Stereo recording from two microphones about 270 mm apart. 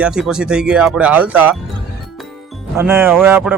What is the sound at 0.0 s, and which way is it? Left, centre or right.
Speech, centre.